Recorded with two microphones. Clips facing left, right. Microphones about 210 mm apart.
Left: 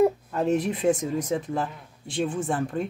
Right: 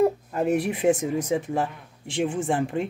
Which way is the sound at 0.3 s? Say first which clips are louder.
Right 1 dB; 10° right (ahead or behind).